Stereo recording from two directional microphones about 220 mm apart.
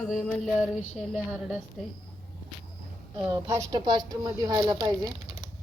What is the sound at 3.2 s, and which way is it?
A woman's voice, 10° right (ahead or behind).